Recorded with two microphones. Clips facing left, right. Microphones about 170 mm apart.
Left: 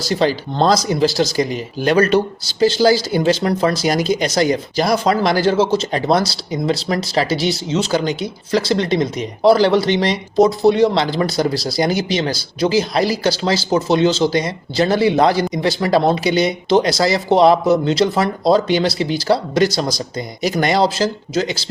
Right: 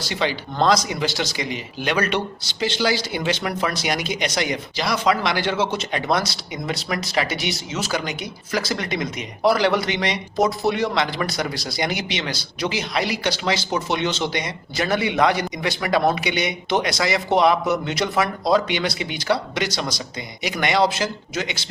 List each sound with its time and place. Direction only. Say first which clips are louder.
0.1 s speech: left 8 dB; 40° left (ahead or behind)